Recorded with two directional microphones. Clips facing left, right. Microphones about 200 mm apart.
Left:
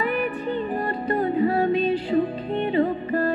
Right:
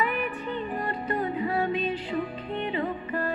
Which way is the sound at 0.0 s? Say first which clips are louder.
Left 4 dB; 35° left (ahead or behind).